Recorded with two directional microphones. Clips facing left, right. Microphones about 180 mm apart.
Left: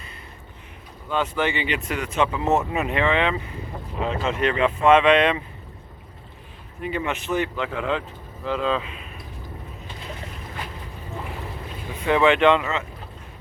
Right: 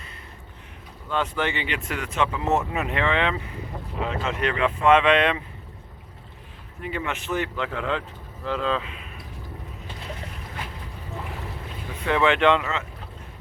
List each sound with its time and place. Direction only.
1.1 s speech: 5° left (ahead or behind)
4.2 s speech: 25° left (ahead or behind)
6.8 s speech: 20° left (ahead or behind)
12.1 s speech: 15° left (ahead or behind)